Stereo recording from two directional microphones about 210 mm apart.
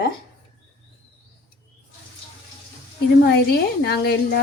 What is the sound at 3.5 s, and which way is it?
Speech, 50° left (ahead or behind).